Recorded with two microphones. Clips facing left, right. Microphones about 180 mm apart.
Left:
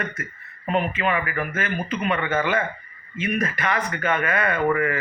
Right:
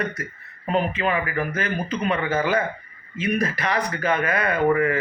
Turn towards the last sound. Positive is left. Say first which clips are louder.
# right 2 dB
turn(degrees=-35)  # may be behind; listen again after turning